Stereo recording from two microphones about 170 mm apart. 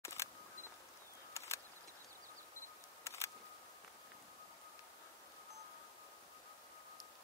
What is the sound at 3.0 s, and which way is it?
Camera, 15° left (ahead or behind).